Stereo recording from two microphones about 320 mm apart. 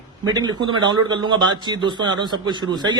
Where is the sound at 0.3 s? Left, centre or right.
Centre.